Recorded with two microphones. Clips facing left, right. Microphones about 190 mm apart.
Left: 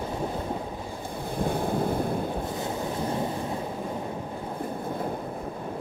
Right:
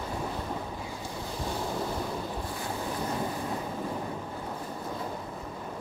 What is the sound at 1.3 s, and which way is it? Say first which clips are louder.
Waves: left 7 dB; 55° left (ahead or behind).